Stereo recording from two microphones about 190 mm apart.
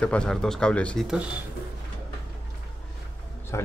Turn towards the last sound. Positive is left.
turn(degrees=15)  # may be behind; listen again after turning